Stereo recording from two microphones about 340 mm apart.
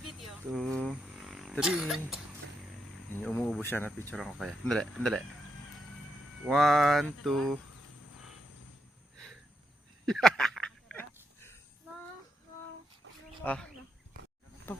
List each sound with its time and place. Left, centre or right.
0.3 s speech: centre
6.4 s speech: centre
8.1 s cricket: left
10.1 s a sound: centre
13.4 s speech: centre
14.7 s speech: centre